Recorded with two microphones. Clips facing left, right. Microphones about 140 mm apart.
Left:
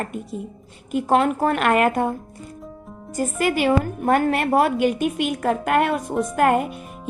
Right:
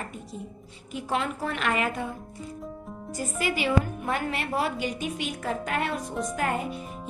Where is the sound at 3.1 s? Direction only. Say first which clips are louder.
Left 8 dB; 50° left (ahead or behind).